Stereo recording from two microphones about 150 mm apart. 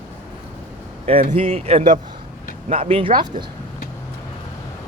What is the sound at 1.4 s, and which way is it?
Speech, 40° right (ahead or behind).